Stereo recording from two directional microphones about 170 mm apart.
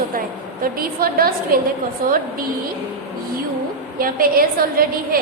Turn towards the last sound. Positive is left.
turn(degrees=-60)  # may be behind; listen again after turning